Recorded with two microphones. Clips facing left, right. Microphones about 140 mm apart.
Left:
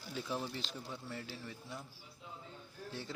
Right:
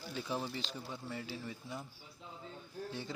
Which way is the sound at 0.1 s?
Centre (ahead or behind).